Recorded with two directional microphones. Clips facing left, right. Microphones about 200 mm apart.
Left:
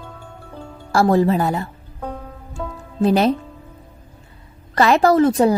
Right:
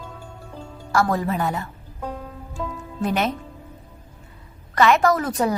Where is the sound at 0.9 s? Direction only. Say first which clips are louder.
Left 6 dB; 30° left (ahead or behind).